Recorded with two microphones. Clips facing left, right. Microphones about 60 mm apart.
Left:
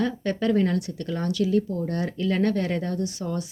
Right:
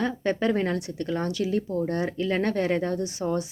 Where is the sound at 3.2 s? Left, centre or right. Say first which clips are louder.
Right 3 dB; right.